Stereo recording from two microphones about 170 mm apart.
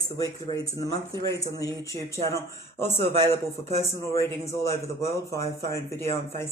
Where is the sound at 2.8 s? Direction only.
15° left (ahead or behind).